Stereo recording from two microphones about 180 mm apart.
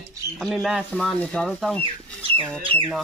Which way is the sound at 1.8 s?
30° right (ahead or behind).